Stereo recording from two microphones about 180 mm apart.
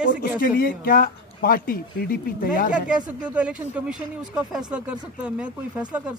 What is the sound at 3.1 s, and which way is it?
Speech, 5° right (ahead or behind).